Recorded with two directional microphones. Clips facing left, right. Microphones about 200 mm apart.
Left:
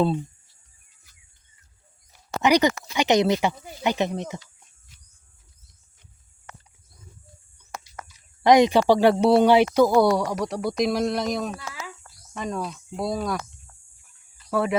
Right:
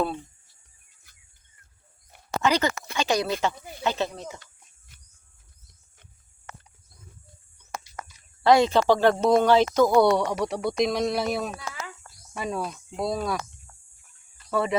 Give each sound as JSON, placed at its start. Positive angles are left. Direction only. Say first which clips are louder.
{"t": 2.4, "sound": "speech", "louder": "left 5 dB", "side_deg": 15}
{"t": 8.4, "sound": "speech", "louder": "left 2 dB", "side_deg": 15}
{"t": 14.5, "sound": "speech", "louder": "left 2 dB", "side_deg": 0}